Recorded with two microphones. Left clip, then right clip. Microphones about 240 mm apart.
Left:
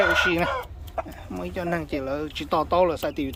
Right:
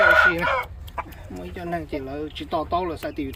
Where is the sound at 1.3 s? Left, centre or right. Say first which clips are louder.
Left 4 dB; centre.